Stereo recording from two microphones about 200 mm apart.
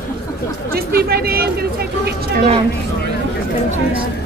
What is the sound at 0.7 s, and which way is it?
Speech, 50° right (ahead or behind).